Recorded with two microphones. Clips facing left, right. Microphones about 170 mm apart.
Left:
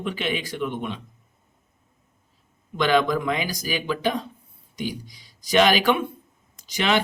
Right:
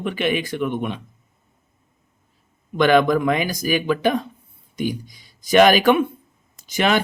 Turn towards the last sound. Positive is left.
turn(degrees=-50)  # may be behind; listen again after turning